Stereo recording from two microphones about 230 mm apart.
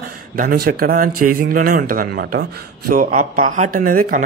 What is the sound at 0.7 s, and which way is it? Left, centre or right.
A man's voice, right.